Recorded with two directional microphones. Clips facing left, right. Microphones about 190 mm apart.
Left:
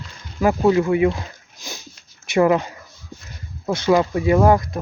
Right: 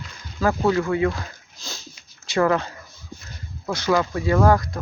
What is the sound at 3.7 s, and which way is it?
Speech, 25° left (ahead or behind).